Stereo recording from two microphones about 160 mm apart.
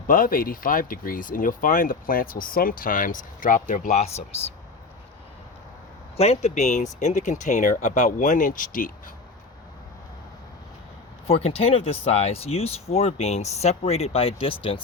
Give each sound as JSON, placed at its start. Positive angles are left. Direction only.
{"t": 0.1, "sound": "speech", "side_deg": 60}
{"t": 6.1, "sound": "speech", "side_deg": 40}
{"t": 11.3, "sound": "speech", "side_deg": 40}